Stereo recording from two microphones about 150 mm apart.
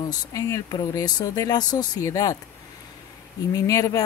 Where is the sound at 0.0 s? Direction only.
25° left (ahead or behind).